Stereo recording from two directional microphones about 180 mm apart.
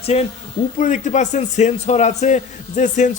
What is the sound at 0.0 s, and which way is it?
Speech, 35° left (ahead or behind).